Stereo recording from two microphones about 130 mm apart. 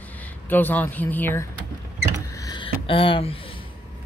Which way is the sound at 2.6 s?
45° left (ahead or behind).